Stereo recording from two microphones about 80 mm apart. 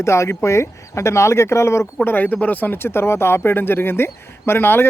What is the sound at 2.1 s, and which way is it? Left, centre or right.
Speech, left.